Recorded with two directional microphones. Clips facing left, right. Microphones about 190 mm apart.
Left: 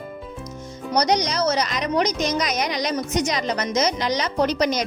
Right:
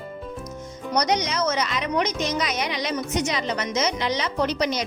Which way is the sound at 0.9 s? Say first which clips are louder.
Left 2 dB; 35° left (ahead or behind).